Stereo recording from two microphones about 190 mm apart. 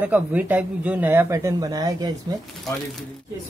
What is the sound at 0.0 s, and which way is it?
Speech, 10° right (ahead or behind).